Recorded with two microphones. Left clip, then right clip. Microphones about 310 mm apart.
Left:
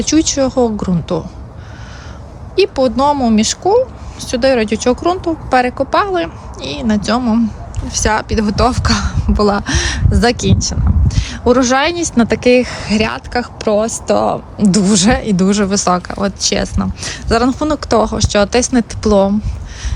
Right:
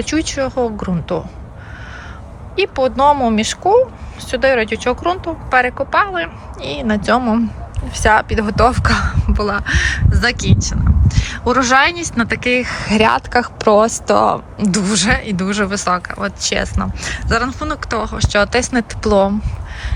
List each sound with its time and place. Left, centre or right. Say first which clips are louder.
0.0 s speech: left 5 dB; centre
2.6 s speech: left 2 dB; centre